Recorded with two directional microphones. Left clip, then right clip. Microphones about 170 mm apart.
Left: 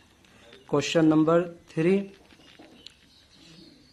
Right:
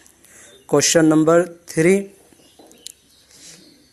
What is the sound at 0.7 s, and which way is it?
Speech, 35° right (ahead or behind).